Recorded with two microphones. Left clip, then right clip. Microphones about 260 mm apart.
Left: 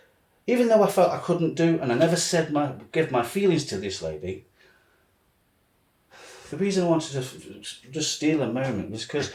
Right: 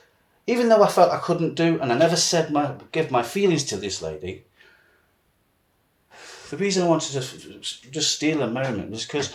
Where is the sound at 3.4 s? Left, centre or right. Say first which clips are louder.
Right 1 dB; right.